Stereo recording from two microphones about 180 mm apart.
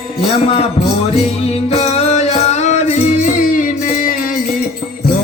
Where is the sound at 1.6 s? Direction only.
35° left (ahead or behind); by 4.4 s 50° left (ahead or behind).